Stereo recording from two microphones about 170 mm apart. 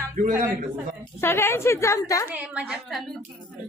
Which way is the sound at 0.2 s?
50° right (ahead or behind).